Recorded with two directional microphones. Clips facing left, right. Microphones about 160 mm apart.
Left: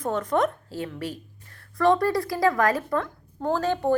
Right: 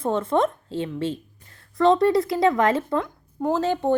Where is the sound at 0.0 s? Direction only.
25° right (ahead or behind).